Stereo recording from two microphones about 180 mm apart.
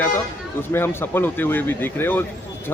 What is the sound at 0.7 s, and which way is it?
Speech, 15° left (ahead or behind).